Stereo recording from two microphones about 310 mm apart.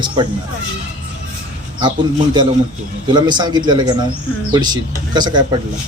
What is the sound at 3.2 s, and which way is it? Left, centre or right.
Speech, centre.